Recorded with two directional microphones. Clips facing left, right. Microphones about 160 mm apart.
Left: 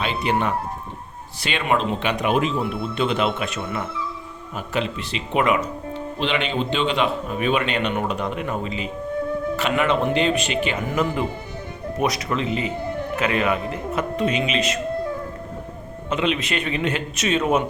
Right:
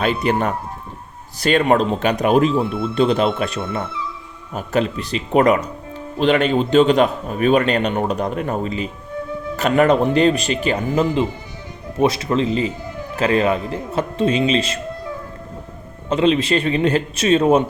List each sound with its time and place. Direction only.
0.0 s a man's voice: 45° right (ahead or behind)
11.9 s a man's voice: 30° right (ahead or behind)
16.0 s a man's voice: 35° right (ahead or behind)